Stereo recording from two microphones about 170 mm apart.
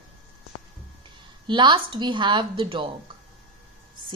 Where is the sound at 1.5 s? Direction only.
30° right (ahead or behind).